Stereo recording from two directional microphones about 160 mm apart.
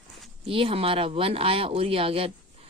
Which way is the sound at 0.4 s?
35° right (ahead or behind).